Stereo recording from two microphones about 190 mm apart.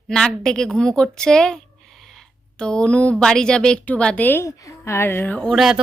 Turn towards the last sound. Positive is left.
turn(degrees=0)  # may be behind; listen again after turning